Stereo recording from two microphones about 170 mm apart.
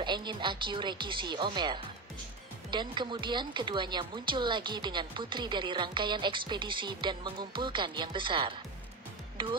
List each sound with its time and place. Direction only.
0.0 s speech: 25° right (ahead or behind)